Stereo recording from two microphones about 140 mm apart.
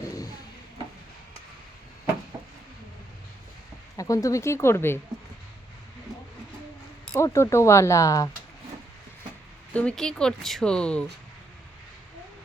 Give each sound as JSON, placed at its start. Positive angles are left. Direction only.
{"t": 3.9, "sound": "speech", "side_deg": 25}
{"t": 7.2, "sound": "speech", "side_deg": 20}
{"t": 9.7, "sound": "speech", "side_deg": 5}